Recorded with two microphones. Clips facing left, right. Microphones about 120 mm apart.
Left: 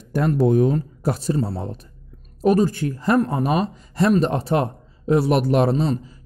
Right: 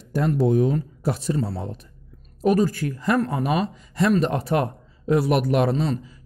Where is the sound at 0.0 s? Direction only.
55° left (ahead or behind).